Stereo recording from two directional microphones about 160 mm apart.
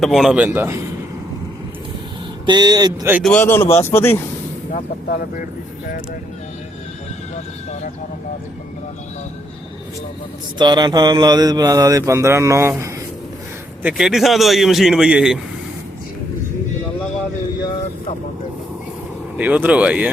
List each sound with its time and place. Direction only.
0.0 s a man's voice: centre (ahead or behind)
2.5 s speech: 25° right (ahead or behind)
3.2 s speech: 10° left (ahead or behind)
4.7 s speech: 60° left (ahead or behind)
10.6 s speech: 25° right (ahead or behind)
13.8 s a man's voice: 5° right (ahead or behind)
19.4 s speech: 10° right (ahead or behind)